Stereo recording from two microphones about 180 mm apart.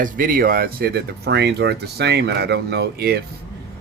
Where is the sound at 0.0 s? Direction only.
50° right (ahead or behind).